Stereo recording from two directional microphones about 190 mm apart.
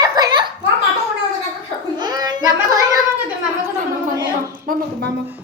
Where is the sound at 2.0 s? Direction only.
20° right (ahead or behind).